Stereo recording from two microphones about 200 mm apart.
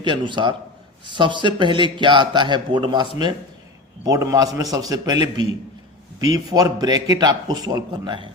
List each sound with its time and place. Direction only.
0.0 s a man's voice: 25° right (ahead or behind)